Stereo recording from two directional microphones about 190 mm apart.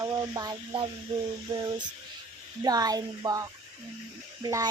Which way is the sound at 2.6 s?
20° right (ahead or behind).